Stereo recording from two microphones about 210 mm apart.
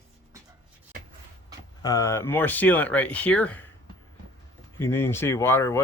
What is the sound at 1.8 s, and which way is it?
Speech, 15° left (ahead or behind).